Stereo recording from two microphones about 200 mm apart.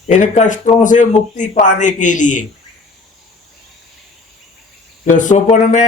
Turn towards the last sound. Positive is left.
turn(degrees=35)  # may be behind; listen again after turning